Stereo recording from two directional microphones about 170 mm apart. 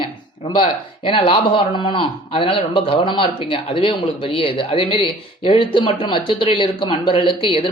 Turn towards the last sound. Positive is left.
turn(degrees=30)  # may be behind; listen again after turning